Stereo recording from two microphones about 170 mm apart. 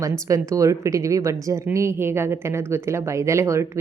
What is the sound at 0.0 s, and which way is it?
A woman's voice, 20° right (ahead or behind).